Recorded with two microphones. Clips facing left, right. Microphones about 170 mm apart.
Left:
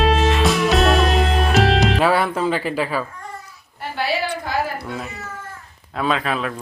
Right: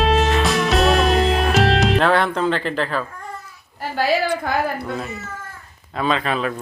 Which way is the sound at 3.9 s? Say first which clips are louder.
Right 4 dB; 45° right (ahead or behind).